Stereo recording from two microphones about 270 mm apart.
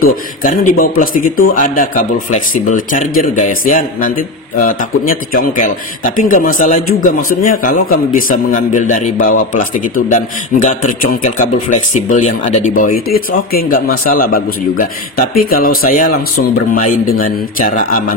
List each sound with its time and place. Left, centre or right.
0.0 s speech: left